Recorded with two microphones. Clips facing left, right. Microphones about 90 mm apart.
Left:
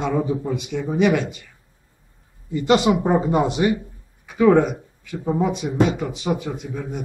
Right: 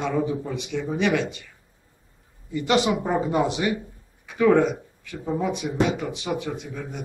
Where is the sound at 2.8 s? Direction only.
15° left (ahead or behind).